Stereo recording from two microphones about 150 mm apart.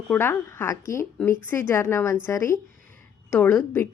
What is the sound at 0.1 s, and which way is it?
A woman's voice, 15° left (ahead or behind).